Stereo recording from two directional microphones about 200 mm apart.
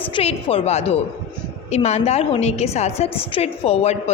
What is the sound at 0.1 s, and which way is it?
A woman's voice, 30° left (ahead or behind).